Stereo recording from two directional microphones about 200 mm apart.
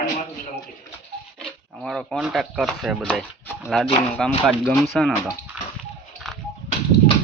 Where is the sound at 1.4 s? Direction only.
Centre (ahead or behind).